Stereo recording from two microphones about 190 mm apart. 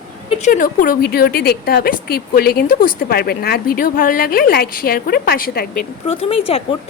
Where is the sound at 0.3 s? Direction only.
40° left (ahead or behind).